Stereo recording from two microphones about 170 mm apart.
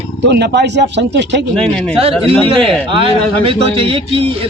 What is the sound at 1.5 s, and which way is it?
Speech, 5° left (ahead or behind).